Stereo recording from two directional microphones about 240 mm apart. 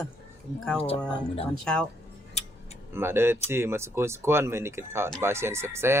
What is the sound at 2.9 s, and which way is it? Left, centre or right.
Speech, centre.